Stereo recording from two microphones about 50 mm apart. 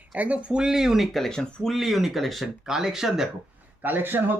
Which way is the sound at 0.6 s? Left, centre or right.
Centre.